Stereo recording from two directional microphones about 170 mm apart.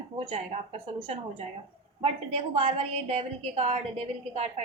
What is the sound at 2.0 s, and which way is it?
A woman's voice, 35° right (ahead or behind).